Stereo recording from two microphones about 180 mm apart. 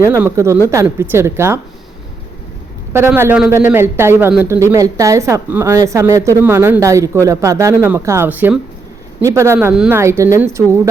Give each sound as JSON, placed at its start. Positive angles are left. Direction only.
{"t": 0.1, "sound": "speech", "side_deg": -15}
{"t": 3.1, "sound": "speech", "side_deg": -10}
{"t": 9.7, "sound": "speech", "side_deg": -5}
{"t": 10.0, "sound": "speech", "side_deg": -15}